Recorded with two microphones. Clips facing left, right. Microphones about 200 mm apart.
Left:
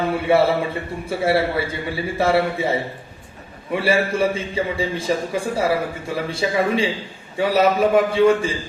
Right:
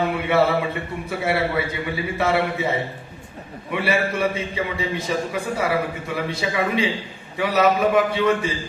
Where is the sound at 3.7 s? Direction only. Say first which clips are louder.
Left 3 dB; 30° left (ahead or behind).